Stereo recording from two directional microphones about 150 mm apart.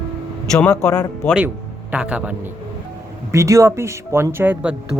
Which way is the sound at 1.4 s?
10° right (ahead or behind).